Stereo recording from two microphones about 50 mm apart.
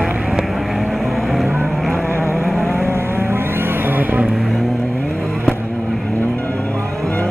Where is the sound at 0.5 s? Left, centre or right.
Centre.